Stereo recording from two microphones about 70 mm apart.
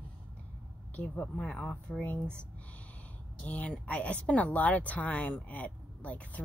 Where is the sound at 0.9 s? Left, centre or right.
Left.